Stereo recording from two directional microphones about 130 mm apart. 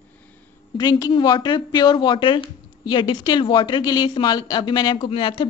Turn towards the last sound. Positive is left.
turn(degrees=40)  # may be behind; listen again after turning